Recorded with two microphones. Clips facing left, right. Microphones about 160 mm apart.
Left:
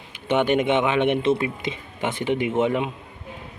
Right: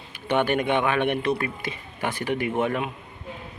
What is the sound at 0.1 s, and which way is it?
Speech, 20° left (ahead or behind).